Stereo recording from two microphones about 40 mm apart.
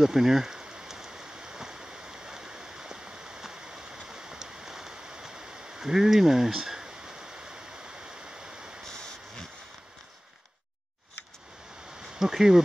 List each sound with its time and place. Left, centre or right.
0.0 s rain: centre
8.8 s a sound: centre
12.1 s speech: centre